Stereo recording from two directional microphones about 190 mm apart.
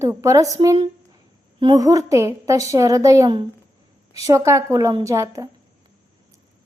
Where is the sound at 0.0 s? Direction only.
15° right (ahead or behind).